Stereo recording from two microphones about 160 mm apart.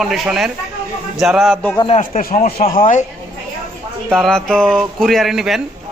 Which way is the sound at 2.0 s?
55° left (ahead or behind).